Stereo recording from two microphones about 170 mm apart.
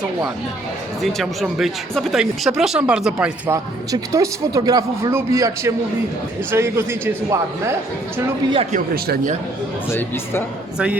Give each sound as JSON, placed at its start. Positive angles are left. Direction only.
{"t": 1.0, "sound": "speech", "side_deg": 0}
{"t": 3.5, "sound": "a man's voice", "side_deg": -20}